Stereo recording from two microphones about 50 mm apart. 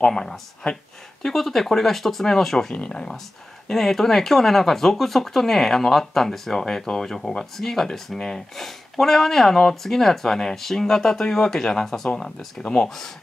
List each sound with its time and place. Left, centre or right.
0.0 s speech: centre
2.7 s speech: centre
3.6 s speech: centre